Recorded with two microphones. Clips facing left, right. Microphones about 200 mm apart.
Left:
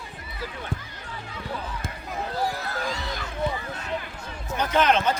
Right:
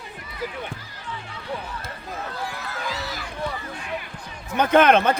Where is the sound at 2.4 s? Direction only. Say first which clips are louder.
Left 4 dB; 40° left (ahead or behind).